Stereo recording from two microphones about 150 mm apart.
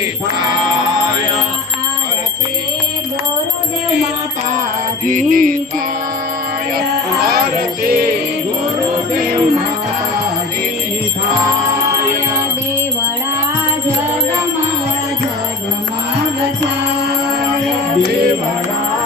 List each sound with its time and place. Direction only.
5.0 s music: 60° right (ahead or behind)
7.3 s music: 80° right